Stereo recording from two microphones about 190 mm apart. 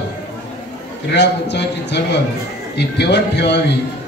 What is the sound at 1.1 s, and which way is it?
A man's voice, 65° left (ahead or behind).